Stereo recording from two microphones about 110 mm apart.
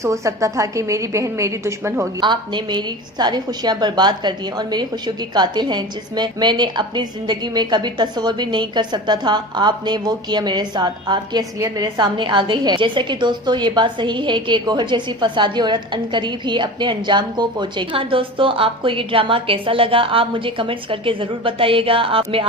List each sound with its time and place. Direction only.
0.0 s a woman's voice: 30° right (ahead or behind)
2.2 s a woman's voice: 45° right (ahead or behind)